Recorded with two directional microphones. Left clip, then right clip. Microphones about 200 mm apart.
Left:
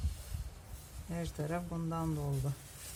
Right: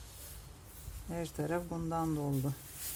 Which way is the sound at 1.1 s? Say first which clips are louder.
Right 3 dB; 30° right (ahead or behind).